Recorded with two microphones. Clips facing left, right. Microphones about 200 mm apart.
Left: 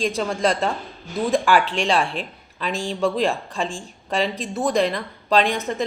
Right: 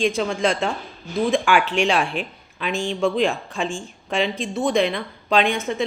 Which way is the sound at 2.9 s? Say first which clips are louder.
Right 1 dB; centre (ahead or behind).